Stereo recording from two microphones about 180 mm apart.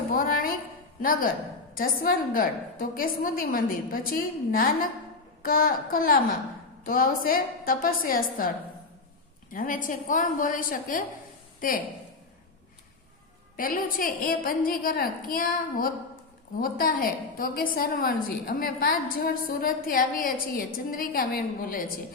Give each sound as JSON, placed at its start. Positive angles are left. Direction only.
{"t": 0.1, "sound": "a sound", "side_deg": 55}
{"t": 1.7, "sound": "a woman's voice", "side_deg": 50}
{"t": 13.6, "sound": "a woman's voice", "side_deg": 50}